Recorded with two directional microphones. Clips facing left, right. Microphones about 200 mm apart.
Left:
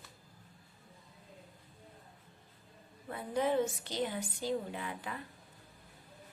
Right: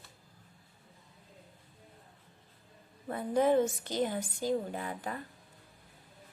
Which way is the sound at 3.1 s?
45° right (ahead or behind).